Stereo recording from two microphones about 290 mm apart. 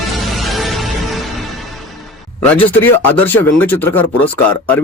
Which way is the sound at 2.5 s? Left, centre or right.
Centre.